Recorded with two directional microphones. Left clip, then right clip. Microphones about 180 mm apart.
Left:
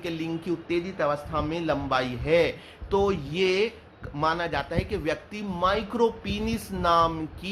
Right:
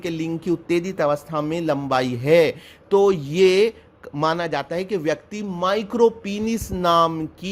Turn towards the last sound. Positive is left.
turn(degrees=-40)  # may be behind; listen again after turning